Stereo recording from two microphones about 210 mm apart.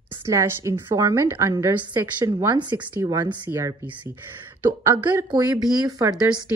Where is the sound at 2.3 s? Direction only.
20° right (ahead or behind).